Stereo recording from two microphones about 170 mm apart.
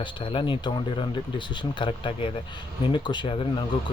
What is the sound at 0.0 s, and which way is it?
Speech, 30° left (ahead or behind).